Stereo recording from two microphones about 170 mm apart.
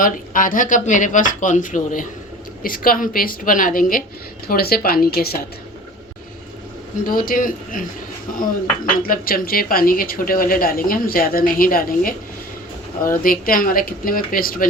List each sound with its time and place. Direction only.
0.0 s a woman's voice: 55° left (ahead or behind)
7.0 s speech: 55° left (ahead or behind)
9.0 s a woman's voice: 60° left (ahead or behind)
13.2 s a woman's voice: 55° left (ahead or behind)